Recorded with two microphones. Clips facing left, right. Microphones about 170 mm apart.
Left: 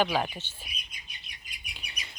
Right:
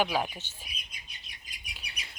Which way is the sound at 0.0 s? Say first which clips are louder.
Left 2 dB; 10° right (ahead or behind).